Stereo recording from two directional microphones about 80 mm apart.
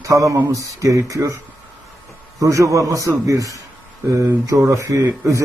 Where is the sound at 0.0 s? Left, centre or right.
Right.